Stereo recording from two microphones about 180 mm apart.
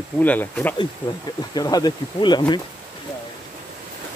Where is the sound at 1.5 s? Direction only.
20° left (ahead or behind).